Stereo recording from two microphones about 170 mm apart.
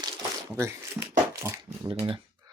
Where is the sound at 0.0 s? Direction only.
25° right (ahead or behind).